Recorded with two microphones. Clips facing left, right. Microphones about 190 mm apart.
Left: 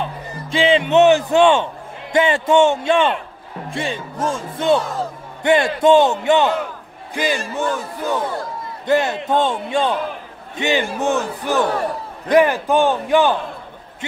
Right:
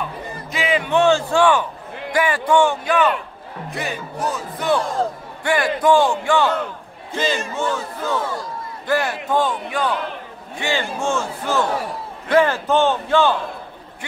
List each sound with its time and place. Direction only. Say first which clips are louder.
0.0 s a man's voice: left 2 dB; 30° left (ahead or behind)